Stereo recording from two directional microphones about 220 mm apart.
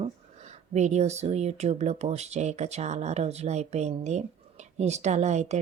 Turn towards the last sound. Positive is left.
turn(degrees=-30)  # may be behind; listen again after turning